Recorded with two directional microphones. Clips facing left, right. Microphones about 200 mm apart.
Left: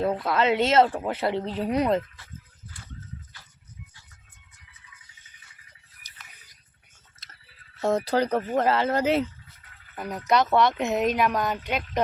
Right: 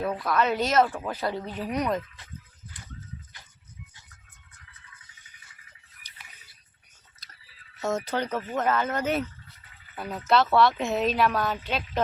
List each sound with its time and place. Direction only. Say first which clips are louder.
0.3 s speech: left 2 dB; 25° left (ahead or behind)
7.8 s speech: left 5 dB; 35° left (ahead or behind)
9.6 s a sound: left 2 dB; centre (ahead or behind)
10.2 s speech: even; 15° left (ahead or behind)